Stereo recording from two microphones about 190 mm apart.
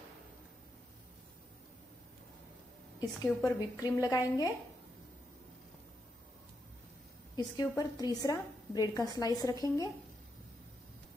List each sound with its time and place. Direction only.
3.0 s a woman's voice: 20° left (ahead or behind)
7.3 s a woman's voice: 20° left (ahead or behind)